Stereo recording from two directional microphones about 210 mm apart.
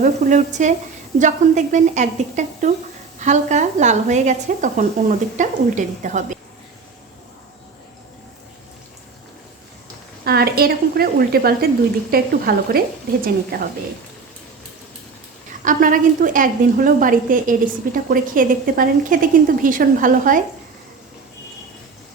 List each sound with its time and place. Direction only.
0.0 s a woman's voice: 35° right (ahead or behind)
10.2 s speech: 50° right (ahead or behind)
15.6 s a woman's voice: 40° right (ahead or behind)